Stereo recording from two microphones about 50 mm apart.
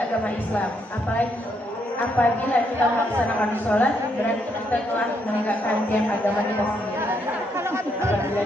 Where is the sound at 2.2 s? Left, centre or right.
Left.